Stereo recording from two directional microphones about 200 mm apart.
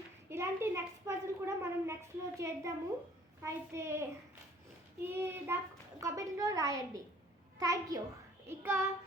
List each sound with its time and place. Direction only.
0.3 s a sound: 10° right (ahead or behind)
3.4 s a woman's voice: 15° right (ahead or behind)
5.0 s a woman's voice: 10° right (ahead or behind)